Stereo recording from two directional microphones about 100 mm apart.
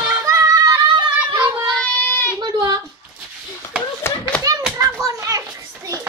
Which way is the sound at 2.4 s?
45° right (ahead or behind).